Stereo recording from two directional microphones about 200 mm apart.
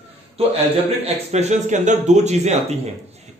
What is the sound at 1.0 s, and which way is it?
Speech, 35° right (ahead or behind).